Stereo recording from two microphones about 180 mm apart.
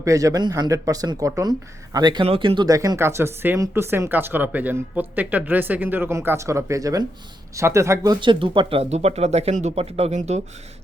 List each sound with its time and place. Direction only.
0.0 s speech: 20° right (ahead or behind); by 10.4 s 40° right (ahead or behind)